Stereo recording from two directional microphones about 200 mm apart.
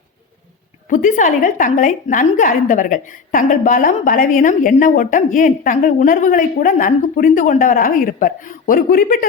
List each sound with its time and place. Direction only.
0.9 s a woman's voice: 40° left (ahead or behind)